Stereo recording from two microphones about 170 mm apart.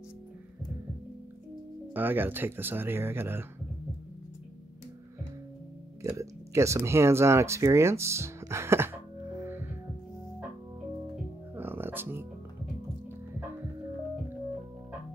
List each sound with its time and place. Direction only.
2.0 s speech: 10° right (ahead or behind)
6.0 s speech: 15° right (ahead or behind)
9.4 s music: 15° right (ahead or behind)
11.5 s music: 10° right (ahead or behind)